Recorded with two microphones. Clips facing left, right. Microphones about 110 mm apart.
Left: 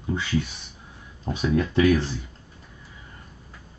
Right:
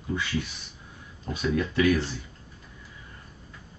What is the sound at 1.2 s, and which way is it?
Speech, 20° left (ahead or behind).